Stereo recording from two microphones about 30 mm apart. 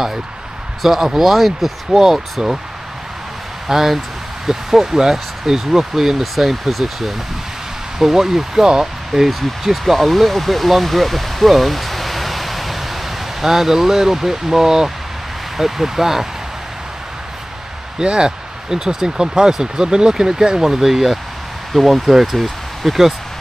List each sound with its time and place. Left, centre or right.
0.8 s speech: centre
3.6 s speech: centre
9.3 s speech: centre
13.4 s speech: centre
17.9 s speech: right; by 22.0 s centre
22.0 s speech: centre
22.8 s speech: centre